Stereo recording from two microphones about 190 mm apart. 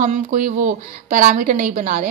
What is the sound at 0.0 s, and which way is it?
A woman's voice, 40° right (ahead or behind).